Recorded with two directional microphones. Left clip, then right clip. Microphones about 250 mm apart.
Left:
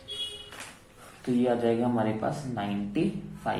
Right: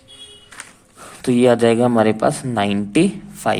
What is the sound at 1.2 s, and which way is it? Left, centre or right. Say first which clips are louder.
A man's voice: right 12 dB; right.